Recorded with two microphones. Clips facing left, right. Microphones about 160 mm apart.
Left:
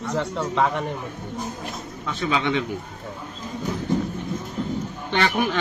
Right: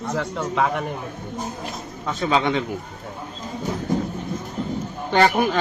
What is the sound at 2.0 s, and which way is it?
Speech, 35° right (ahead or behind).